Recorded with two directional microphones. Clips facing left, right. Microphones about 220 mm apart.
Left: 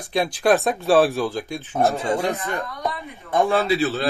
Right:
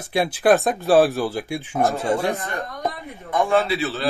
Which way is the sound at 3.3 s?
30° left (ahead or behind).